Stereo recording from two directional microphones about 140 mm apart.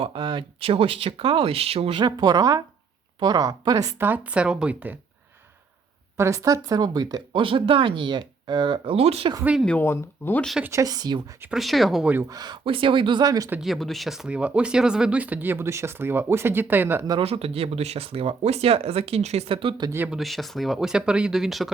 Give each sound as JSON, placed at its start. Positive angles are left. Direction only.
{"t": 0.0, "sound": "speech", "side_deg": -35}
{"t": 2.0, "sound": "a woman's voice", "side_deg": -30}
{"t": 4.0, "sound": "speech", "side_deg": -10}
{"t": 6.1, "sound": "speech", "side_deg": -20}
{"t": 9.4, "sound": "speech", "side_deg": -10}
{"t": 9.6, "sound": "speech", "side_deg": 15}
{"t": 10.6, "sound": "a woman's voice", "side_deg": -20}
{"t": 11.5, "sound": "speech", "side_deg": 0}
{"t": 12.1, "sound": "speech", "side_deg": -25}
{"t": 13.6, "sound": "speech", "side_deg": 0}
{"t": 17.1, "sound": "speech", "side_deg": -40}
{"t": 20.1, "sound": "speech", "side_deg": 0}